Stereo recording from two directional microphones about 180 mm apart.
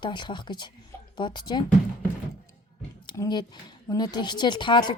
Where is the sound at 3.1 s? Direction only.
20° left (ahead or behind).